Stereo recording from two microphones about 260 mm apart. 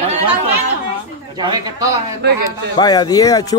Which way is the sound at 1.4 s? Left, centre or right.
Centre.